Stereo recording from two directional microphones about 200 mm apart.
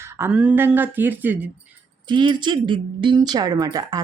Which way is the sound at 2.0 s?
25° right (ahead or behind).